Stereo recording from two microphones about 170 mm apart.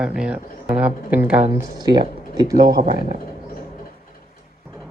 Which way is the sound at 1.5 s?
25° right (ahead or behind).